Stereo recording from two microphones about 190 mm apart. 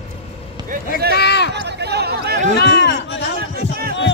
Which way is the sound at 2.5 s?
65° left (ahead or behind).